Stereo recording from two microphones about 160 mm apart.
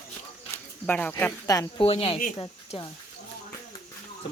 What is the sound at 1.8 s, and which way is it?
Speech, 40° left (ahead or behind).